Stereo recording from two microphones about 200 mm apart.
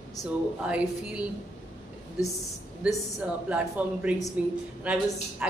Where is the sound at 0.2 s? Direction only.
15° left (ahead or behind).